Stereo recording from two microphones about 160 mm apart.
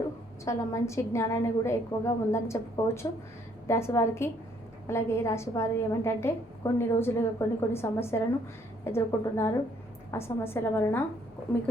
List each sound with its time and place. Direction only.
0.4 s a woman's voice: 20° left (ahead or behind)